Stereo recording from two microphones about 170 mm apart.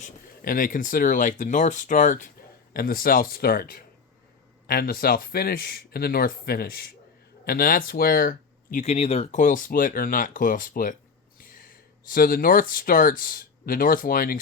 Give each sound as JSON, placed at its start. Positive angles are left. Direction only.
{"t": 0.0, "sound": "speech", "side_deg": 55}
{"t": 2.7, "sound": "speech", "side_deg": 60}
{"t": 8.8, "sound": "speech", "side_deg": 40}